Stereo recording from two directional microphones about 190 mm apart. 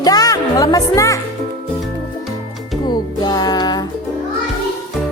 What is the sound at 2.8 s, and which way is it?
Music, 20° left (ahead or behind).